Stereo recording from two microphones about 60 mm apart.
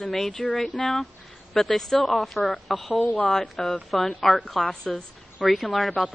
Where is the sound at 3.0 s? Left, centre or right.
Left.